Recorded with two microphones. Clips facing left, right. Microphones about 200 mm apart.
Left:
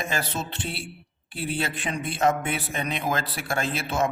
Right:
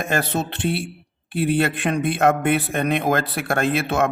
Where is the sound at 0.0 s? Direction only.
60° right (ahead or behind).